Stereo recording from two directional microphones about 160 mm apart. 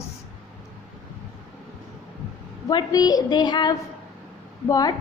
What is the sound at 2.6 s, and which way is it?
A woman's voice, 25° left (ahead or behind).